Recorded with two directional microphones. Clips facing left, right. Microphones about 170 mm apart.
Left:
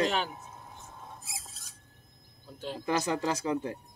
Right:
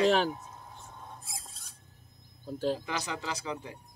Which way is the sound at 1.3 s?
Centre (ahead or behind).